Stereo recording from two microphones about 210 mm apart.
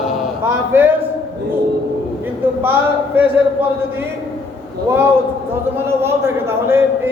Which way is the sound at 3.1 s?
10° right (ahead or behind).